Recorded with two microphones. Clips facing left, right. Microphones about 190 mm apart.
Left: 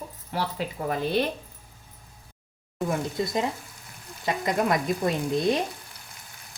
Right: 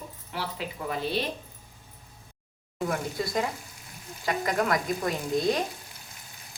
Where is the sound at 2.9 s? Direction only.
20° left (ahead or behind).